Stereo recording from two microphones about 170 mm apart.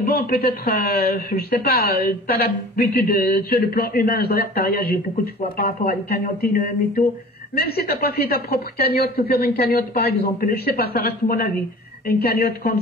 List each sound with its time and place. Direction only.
0.0 s speech: 65° left (ahead or behind)
7.5 s speech: 65° left (ahead or behind)